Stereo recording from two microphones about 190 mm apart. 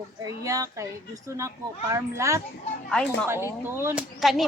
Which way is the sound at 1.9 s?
15° right (ahead or behind).